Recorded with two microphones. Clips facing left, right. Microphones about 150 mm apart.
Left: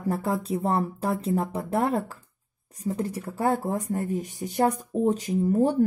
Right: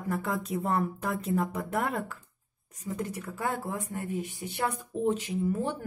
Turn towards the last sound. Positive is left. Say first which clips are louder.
# left 7 dB
turn(degrees=40)  # may be behind; listen again after turning